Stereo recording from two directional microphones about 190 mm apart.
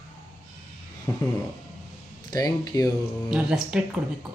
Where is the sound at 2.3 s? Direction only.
20° left (ahead or behind).